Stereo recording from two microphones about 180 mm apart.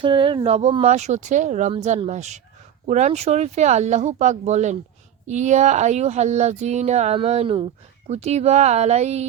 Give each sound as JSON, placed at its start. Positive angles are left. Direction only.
{"t": 0.0, "sound": "speech", "side_deg": -30}